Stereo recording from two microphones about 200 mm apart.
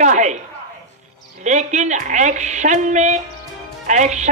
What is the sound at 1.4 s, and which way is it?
A woman's voice, 35° right (ahead or behind).